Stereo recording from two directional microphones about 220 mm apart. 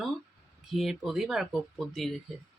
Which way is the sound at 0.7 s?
Centre (ahead or behind).